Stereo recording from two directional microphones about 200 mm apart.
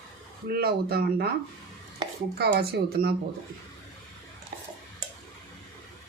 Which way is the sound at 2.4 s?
55° right (ahead or behind).